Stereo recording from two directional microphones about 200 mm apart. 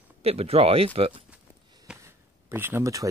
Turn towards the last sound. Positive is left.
turn(degrees=-15)  # may be behind; listen again after turning